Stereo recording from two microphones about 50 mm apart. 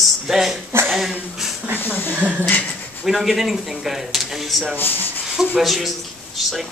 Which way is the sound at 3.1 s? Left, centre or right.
Centre.